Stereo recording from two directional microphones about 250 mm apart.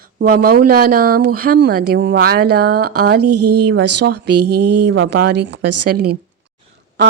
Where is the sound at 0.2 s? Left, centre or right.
Right.